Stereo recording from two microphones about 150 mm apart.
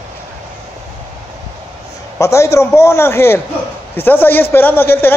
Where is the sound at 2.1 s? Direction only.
20° left (ahead or behind).